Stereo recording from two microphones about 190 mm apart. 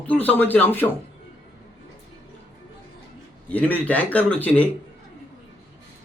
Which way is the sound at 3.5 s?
10° left (ahead or behind).